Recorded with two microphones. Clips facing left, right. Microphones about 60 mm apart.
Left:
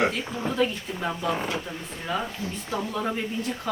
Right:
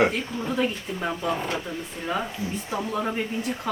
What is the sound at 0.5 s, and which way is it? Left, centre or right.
Speech, centre.